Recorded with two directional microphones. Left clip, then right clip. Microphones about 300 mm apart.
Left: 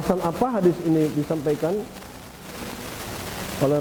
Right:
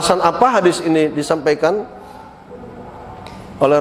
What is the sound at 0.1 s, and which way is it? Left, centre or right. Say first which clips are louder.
A man's voice: right 10 dB; centre.